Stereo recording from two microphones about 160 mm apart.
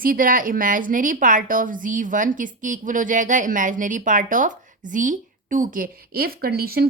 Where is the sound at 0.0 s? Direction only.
60° right (ahead or behind).